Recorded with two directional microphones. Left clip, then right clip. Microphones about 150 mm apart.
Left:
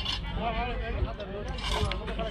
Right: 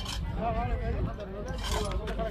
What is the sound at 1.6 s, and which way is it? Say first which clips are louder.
Speech: left 2 dB; 5° left (ahead or behind).